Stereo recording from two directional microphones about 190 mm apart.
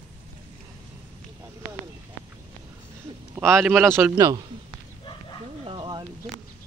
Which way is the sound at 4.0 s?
15° right (ahead or behind).